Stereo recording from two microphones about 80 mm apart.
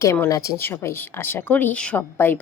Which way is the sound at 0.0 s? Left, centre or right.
Left.